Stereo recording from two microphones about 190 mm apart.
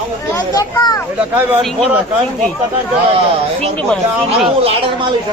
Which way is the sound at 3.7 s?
5° left (ahead or behind).